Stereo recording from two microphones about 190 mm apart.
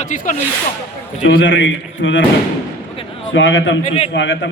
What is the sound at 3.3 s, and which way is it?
Speech, 80° left.